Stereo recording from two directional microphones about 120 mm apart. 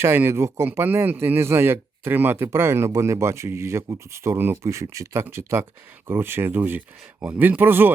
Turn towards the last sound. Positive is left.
turn(degrees=-15)  # may be behind; listen again after turning